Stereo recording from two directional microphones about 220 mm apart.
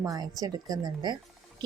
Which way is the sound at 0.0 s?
15° right (ahead or behind).